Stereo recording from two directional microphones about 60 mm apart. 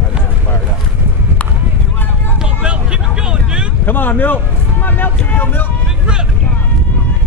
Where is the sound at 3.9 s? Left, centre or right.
Left.